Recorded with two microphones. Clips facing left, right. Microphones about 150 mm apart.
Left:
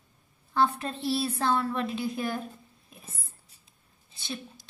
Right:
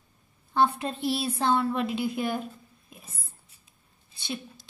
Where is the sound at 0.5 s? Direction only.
15° right (ahead or behind).